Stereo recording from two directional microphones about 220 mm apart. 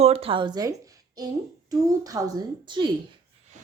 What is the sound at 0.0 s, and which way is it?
A woman's voice, 25° right (ahead or behind).